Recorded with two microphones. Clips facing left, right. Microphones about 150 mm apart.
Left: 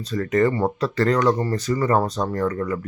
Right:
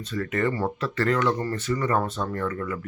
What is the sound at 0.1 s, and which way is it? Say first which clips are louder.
Speech: left 6 dB; 40° left (ahead or behind).